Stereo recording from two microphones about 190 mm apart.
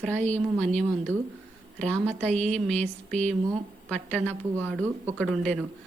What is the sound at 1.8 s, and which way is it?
A woman's voice, 5° left (ahead or behind).